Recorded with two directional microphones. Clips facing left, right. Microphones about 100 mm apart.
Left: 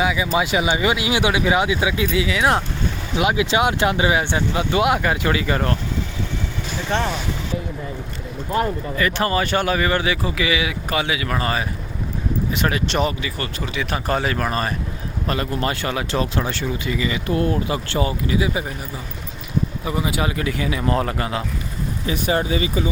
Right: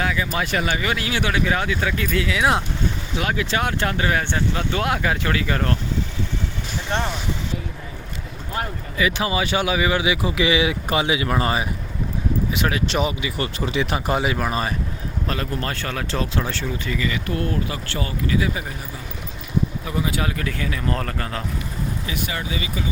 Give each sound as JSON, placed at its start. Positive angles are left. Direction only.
{"t": 0.0, "sound": "speech", "side_deg": 15}
{"t": 2.0, "sound": "speech", "side_deg": 0}
{"t": 3.2, "sound": "speech", "side_deg": 15}
{"t": 9.0, "sound": "speech", "side_deg": -5}
{"t": 12.5, "sound": "speech", "side_deg": 0}
{"t": 13.3, "sound": "speech", "side_deg": -25}
{"t": 14.1, "sound": "speech", "side_deg": -10}
{"t": 15.3, "sound": "speech", "side_deg": 5}
{"t": 16.8, "sound": "speech", "side_deg": 15}
{"t": 19.8, "sound": "speech", "side_deg": 10}
{"t": 22.0, "sound": "speech", "side_deg": 35}